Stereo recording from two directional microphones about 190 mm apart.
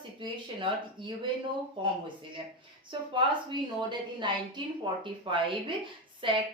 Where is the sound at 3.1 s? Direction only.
25° right (ahead or behind).